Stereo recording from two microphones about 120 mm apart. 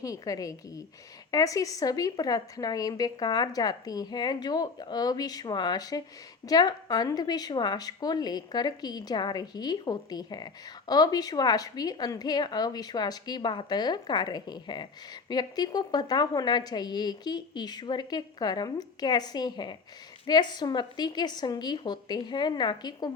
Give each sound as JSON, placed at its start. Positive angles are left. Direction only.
{"t": 0.0, "sound": "a woman's voice", "side_deg": 30}